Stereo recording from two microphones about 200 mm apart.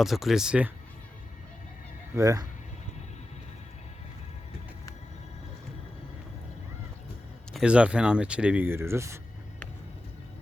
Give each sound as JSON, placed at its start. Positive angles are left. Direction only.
{"t": 0.0, "sound": "speech", "side_deg": 0}
{"t": 2.1, "sound": "speech", "side_deg": -15}
{"t": 7.5, "sound": "speech", "side_deg": -5}